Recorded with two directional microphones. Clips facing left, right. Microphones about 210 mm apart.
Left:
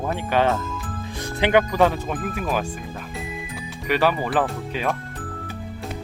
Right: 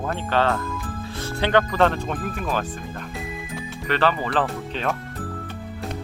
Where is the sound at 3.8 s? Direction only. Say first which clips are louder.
Left 1 dB; 10° left (ahead or behind).